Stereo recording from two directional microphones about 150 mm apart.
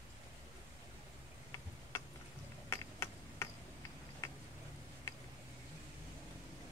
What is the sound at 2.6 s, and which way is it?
Tick-tock, 20° left (ahead or behind).